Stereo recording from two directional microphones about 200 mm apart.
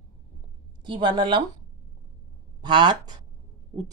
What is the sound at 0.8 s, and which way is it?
Speech, 25° right (ahead or behind).